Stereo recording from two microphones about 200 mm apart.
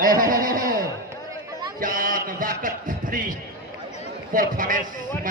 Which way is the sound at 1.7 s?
45° right (ahead or behind).